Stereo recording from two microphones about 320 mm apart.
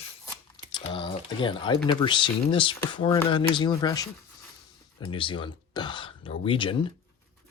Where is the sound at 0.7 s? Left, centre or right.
Centre.